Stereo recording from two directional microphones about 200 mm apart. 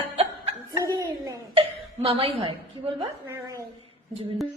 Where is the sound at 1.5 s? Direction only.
30° right (ahead or behind).